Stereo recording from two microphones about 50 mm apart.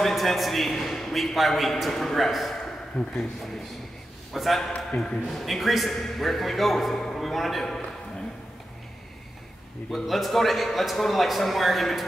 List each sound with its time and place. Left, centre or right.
0.0 s a man's voice: centre
2.9 s speech: centre
4.3 s a man's voice: centre
9.9 s a man's voice: centre